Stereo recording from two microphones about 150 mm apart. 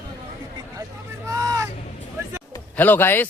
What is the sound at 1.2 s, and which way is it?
Vehicle, 20° right (ahead or behind).